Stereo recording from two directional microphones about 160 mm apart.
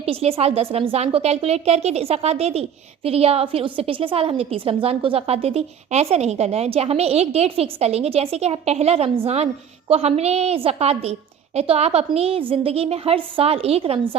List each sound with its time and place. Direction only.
0.0 s speech: 40° right (ahead or behind)